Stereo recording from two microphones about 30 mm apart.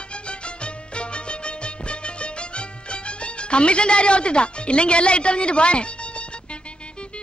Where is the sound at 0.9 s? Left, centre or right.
Left.